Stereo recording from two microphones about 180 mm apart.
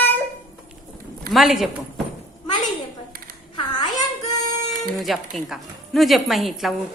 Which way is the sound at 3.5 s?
25° left (ahead or behind).